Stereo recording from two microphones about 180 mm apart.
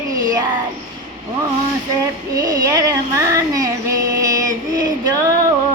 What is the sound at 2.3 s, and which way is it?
Child singing, 20° right (ahead or behind).